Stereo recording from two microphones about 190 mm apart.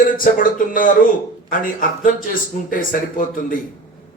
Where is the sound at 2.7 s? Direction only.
45° left (ahead or behind).